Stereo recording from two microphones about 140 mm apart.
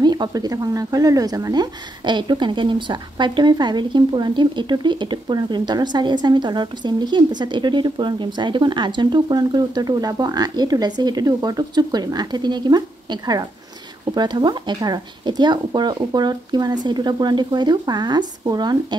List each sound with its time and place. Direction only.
0.0 s speech: 30° right (ahead or behind)